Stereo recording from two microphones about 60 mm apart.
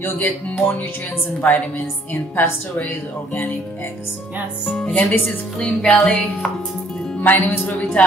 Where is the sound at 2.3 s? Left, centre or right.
Left.